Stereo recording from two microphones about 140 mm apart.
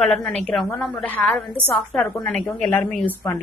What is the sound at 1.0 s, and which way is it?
Speech, 10° left (ahead or behind).